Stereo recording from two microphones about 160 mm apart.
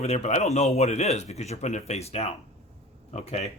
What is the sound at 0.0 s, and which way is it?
Speech, 45° left (ahead or behind).